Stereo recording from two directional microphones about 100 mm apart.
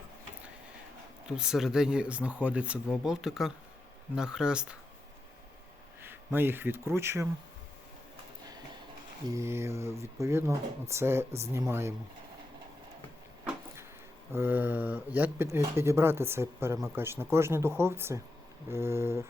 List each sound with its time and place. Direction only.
1.4 s speech: 5° right (ahead or behind)
6.0 s speech: 20° right (ahead or behind)
9.3 s speech: 25° right (ahead or behind)
14.3 s speech: 20° right (ahead or behind)